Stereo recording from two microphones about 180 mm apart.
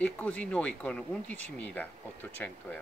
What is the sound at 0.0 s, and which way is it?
Speech, 5° left (ahead or behind).